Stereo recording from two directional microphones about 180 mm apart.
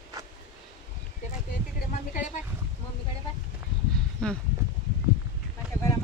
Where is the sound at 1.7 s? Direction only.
45° left (ahead or behind).